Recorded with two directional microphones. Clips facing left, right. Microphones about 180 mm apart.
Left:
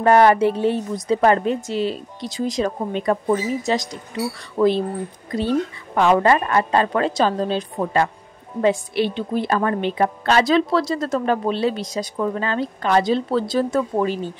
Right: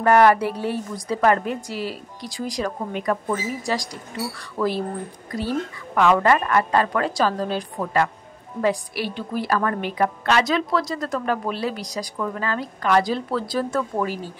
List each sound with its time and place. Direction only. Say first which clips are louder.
0.0 s a woman's voice: left 2 dB; 25° left (ahead or behind)